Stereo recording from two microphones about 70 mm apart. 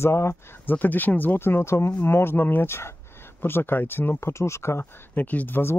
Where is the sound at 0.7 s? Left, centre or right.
Left.